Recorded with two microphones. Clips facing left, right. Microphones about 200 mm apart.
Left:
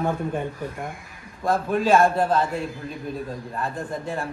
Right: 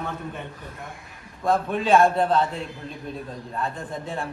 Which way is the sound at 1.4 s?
Centre (ahead or behind).